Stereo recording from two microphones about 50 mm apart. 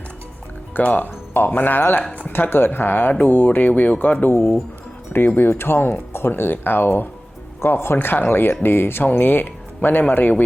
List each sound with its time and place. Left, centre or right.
0.7 s speech: left
4.3 s speech: left
5.1 s speech: left
7.9 s speech: left